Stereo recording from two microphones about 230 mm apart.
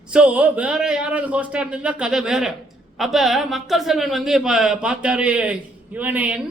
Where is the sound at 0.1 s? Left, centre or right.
Centre.